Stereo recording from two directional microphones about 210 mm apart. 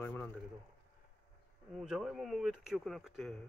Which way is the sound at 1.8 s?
Centre (ahead or behind).